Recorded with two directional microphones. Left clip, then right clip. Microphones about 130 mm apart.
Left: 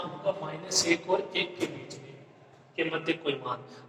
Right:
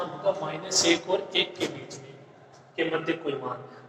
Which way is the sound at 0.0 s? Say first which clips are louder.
Right 4 dB; 30° left (ahead or behind).